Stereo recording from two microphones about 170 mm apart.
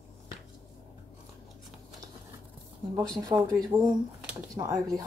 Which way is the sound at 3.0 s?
20° right (ahead or behind).